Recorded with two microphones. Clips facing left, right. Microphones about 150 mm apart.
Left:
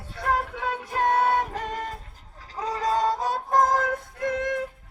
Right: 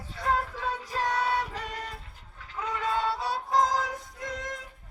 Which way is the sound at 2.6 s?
35° left (ahead or behind).